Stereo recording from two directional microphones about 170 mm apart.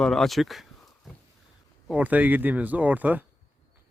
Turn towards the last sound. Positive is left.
turn(degrees=-10)  # may be behind; listen again after turning